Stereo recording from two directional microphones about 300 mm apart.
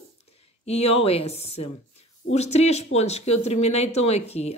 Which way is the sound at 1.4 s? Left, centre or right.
Left.